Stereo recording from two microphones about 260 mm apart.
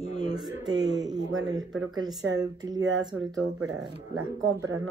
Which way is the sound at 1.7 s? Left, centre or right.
Right.